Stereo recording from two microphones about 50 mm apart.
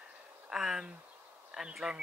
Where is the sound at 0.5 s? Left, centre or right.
Centre.